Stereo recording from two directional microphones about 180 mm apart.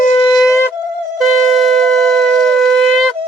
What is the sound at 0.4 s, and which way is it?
Shofar, 15° left (ahead or behind).